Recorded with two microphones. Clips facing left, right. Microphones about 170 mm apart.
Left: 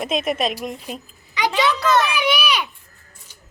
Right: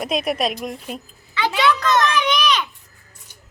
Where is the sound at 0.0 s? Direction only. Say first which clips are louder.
Even; centre (ahead or behind).